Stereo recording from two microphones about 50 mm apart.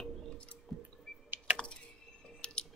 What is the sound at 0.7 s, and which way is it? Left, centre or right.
Squish, centre.